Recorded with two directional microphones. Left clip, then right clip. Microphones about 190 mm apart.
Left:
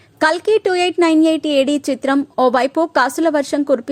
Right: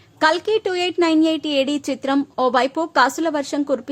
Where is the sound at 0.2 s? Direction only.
25° left (ahead or behind).